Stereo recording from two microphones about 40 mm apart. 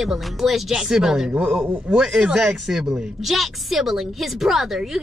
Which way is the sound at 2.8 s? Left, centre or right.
Centre.